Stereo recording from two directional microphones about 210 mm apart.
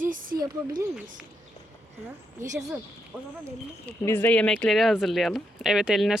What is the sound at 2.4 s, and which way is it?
Speech, 35° right (ahead or behind).